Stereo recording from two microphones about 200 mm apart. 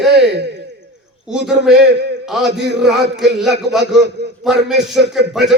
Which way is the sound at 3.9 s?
60° right (ahead or behind).